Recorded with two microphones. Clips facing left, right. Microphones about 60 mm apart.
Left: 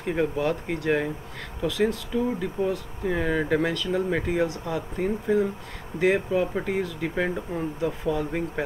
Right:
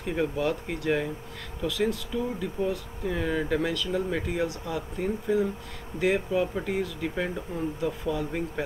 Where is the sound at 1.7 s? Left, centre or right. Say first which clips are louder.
Left 3 dB; centre.